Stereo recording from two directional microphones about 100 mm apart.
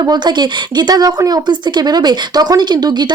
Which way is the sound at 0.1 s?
45° right (ahead or behind).